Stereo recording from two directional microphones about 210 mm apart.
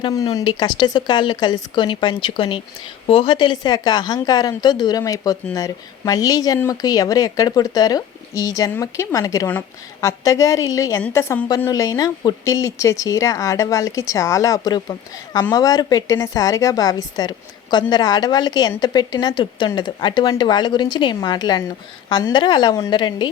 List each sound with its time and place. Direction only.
0.0 s a woman's voice: 15° left (ahead or behind)